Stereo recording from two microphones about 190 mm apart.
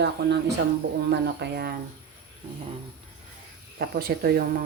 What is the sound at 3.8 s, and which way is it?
Speech, 55° right (ahead or behind).